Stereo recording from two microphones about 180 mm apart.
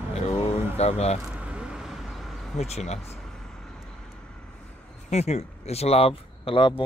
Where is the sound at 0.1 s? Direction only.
40° left (ahead or behind).